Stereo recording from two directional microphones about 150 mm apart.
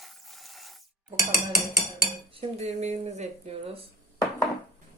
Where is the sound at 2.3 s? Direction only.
45° right (ahead or behind).